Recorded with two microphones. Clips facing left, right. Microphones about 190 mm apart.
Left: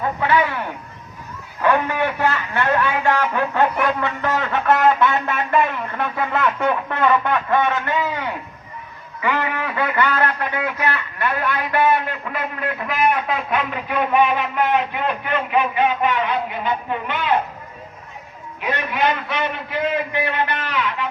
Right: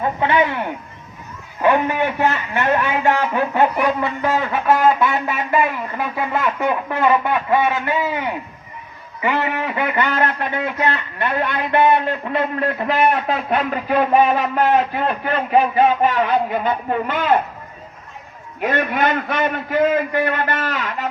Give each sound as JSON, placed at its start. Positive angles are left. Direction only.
{"t": 0.2, "sound": "speech", "side_deg": -20}
{"t": 1.6, "sound": "a man's voice", "side_deg": -15}
{"t": 18.6, "sound": "a man's voice", "side_deg": -50}